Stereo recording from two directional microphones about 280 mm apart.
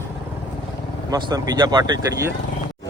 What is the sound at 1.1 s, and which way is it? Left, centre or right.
Speech, centre.